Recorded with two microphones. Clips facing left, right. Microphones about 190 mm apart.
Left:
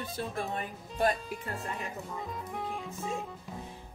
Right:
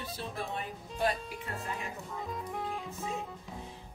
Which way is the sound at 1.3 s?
Centre (ahead or behind).